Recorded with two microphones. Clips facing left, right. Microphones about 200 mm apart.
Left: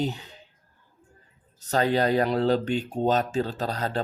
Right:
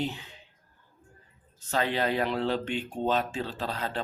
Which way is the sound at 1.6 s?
40° left (ahead or behind).